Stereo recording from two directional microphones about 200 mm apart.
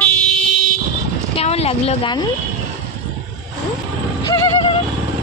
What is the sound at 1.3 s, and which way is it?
Speech, 30° left (ahead or behind).